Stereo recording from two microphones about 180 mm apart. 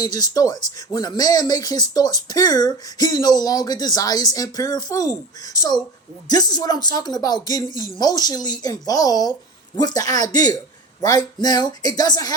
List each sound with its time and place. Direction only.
0.0 s speech: 20° left (ahead or behind)